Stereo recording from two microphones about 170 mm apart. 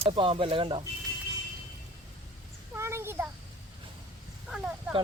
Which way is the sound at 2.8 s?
15° right (ahead or behind).